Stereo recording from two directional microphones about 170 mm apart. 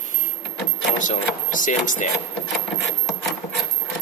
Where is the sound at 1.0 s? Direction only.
50° left (ahead or behind).